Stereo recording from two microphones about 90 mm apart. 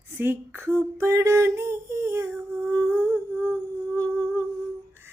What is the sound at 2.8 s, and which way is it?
Humming, 30° right (ahead or behind).